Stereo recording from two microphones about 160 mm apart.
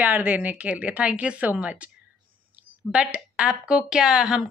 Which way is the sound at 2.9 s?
5° right (ahead or behind).